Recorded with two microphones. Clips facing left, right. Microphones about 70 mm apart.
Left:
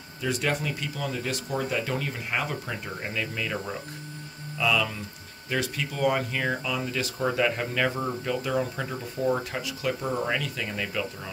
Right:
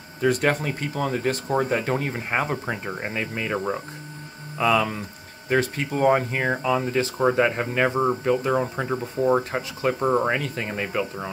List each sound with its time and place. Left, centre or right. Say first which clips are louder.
0.2 s speech: right 6 dB; right